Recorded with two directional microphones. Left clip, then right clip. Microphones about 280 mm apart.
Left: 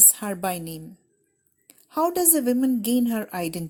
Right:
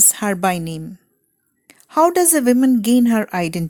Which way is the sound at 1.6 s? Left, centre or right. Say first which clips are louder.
Right 9 dB; right.